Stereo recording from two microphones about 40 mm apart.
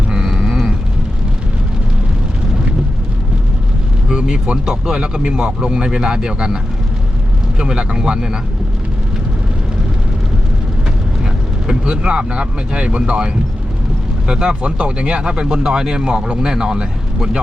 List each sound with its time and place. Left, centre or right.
0.1 s vehicle: centre
4.5 s speech: centre
7.6 s speech: right
11.7 s speech: right
16.4 s speech: centre